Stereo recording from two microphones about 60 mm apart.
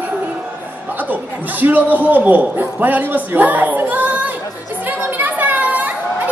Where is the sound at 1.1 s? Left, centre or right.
Right.